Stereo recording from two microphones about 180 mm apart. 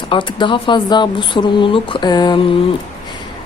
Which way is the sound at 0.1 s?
25° left (ahead or behind).